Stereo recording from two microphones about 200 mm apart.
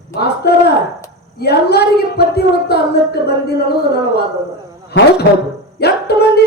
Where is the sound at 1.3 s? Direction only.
55° left (ahead or behind).